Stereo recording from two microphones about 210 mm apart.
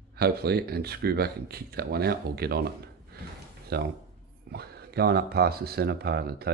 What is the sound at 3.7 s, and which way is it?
Speech, 50° right (ahead or behind).